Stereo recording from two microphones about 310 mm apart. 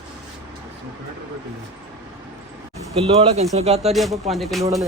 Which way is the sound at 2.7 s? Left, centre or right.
Centre.